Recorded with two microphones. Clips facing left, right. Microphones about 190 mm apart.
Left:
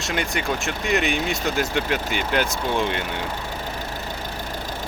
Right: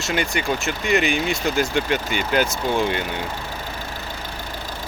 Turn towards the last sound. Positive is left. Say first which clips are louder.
# right 2 dB
turn(degrees=0)  # may be behind; listen again after turning